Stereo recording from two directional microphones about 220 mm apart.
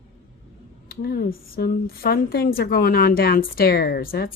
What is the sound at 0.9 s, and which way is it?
Speech, 45° left (ahead or behind).